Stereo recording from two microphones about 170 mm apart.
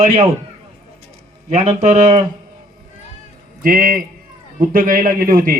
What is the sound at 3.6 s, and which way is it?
A man's voice, 55° right (ahead or behind).